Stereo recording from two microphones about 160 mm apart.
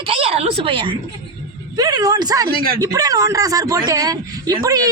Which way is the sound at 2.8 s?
20° right (ahead or behind).